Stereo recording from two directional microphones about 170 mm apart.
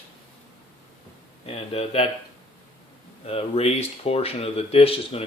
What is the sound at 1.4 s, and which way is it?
Speech, 35° left (ahead or behind).